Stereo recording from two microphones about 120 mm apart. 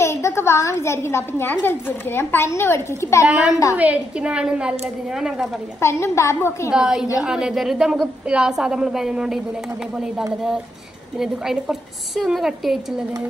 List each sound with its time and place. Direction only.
0.0 s a woman's voice: 20° left (ahead or behind)
3.7 s a woman's voice: 10° right (ahead or behind)
5.8 s a woman's voice: 25° left (ahead or behind)
6.7 s a woman's voice: 5° right (ahead or behind)
11.1 s a woman's voice: 5° right (ahead or behind)